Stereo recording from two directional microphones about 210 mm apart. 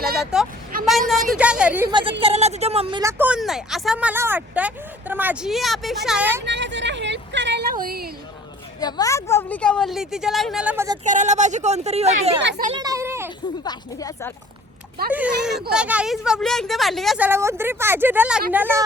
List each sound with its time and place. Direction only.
0.3 s a woman's voice: 5° right (ahead or behind)
1.9 s speech: 20° right (ahead or behind)
3.0 s speech: 10° right (ahead or behind)
6.4 s speech: 55° right (ahead or behind)
8.8 s a woman's voice: 20° left (ahead or behind); by 10.8 s 5° right (ahead or behind)
11.0 s a woman's voice: 35° right (ahead or behind)
12.4 s a child's voice: 55° right (ahead or behind)
12.7 s speech: 15° right (ahead or behind)
13.7 s speech: 15° left (ahead or behind)
15.1 s a woman's voice: 5° right (ahead or behind)
17.2 s speech: 10° right (ahead or behind)